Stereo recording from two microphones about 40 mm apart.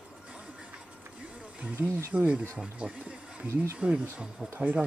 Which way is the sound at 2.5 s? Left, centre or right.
Right.